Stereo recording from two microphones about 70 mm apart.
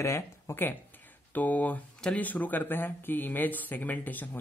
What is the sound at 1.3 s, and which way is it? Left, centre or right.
Speech, left.